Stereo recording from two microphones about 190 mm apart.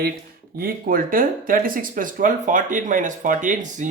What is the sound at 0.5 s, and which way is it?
Speech, 50° right (ahead or behind).